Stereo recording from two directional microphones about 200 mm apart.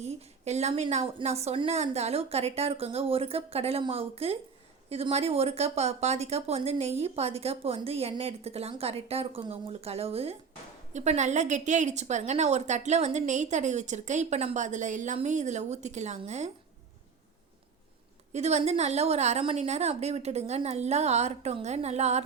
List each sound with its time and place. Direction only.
0.0 s a woman's voice: 35° right (ahead or behind)
18.3 s a woman's voice: 35° right (ahead or behind)